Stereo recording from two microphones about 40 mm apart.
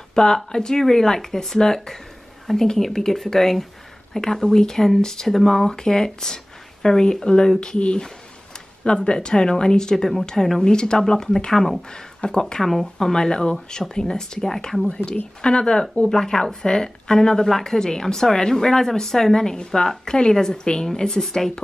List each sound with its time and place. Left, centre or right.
0.1 s a woman's voice: centre
11.9 s speech: centre
12.6 s speech: centre
13.1 s a woman's voice: centre
15.4 s a woman's voice: left
19.3 s a woman's voice: centre